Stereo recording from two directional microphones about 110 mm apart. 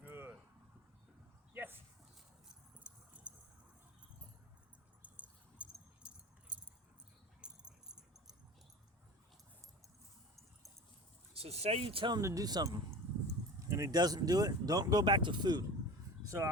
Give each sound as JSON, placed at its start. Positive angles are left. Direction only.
{"t": 0.0, "sound": "a sound", "side_deg": -20}
{"t": 1.5, "sound": "a sound", "side_deg": -20}
{"t": 2.5, "sound": "keys jangling", "side_deg": -10}
{"t": 5.0, "sound": "keys jangling", "side_deg": -15}
{"t": 11.3, "sound": "speech", "side_deg": -70}
{"t": 12.1, "sound": "speech", "side_deg": -30}
{"t": 16.2, "sound": "speech", "side_deg": -25}